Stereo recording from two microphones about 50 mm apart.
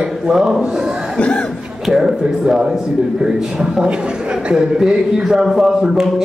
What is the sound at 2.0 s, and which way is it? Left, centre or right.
Speech, centre.